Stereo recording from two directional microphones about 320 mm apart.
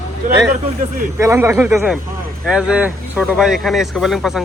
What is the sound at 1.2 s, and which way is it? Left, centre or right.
Speech, centre.